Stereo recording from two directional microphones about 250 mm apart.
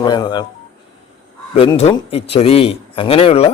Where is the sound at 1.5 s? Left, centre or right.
Left.